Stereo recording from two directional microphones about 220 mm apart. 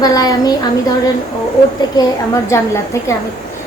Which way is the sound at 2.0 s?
15° left (ahead or behind).